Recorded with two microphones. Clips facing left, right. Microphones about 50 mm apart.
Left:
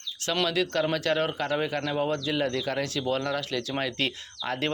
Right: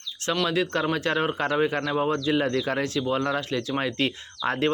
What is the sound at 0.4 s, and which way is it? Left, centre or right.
Speech, right.